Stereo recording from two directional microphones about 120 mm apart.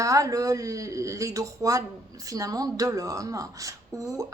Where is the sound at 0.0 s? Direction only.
30° right (ahead or behind).